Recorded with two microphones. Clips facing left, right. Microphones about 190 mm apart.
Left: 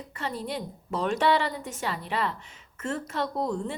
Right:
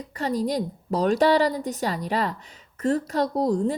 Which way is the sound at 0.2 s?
40° right (ahead or behind).